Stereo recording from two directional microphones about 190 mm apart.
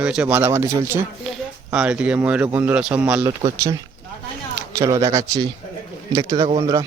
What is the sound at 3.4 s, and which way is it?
A man's voice, 20° right (ahead or behind).